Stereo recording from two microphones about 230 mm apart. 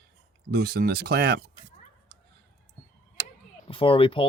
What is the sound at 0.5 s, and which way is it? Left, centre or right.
Speech, right.